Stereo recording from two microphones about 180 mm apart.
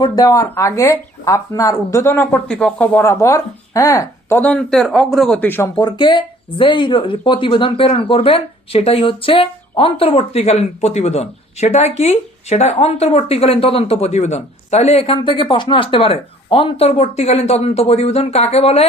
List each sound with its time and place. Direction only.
0.0 s speech: 20° left (ahead or behind)